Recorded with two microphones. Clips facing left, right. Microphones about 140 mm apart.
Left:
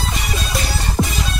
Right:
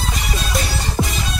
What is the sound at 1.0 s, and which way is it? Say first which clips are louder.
Music: left 2 dB; centre (ahead or behind).